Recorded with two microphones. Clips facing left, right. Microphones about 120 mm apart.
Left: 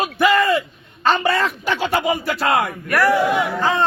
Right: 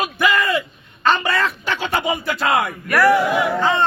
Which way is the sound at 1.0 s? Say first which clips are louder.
Left 1 dB; 35° left (ahead or behind).